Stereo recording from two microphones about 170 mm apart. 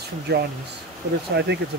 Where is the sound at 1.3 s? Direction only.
85° right.